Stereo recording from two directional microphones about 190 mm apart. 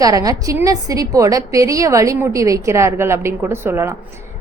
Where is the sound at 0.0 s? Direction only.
20° right (ahead or behind).